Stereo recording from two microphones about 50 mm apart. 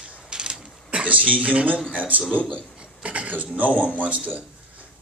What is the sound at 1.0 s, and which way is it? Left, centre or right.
Speech, right.